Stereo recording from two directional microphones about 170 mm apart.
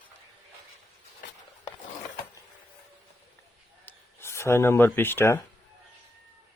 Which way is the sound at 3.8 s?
15° left (ahead or behind).